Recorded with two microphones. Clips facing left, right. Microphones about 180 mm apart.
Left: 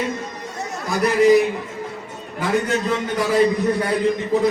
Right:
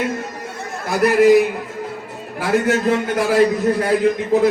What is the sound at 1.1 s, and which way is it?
A man's voice, centre (ahead or behind).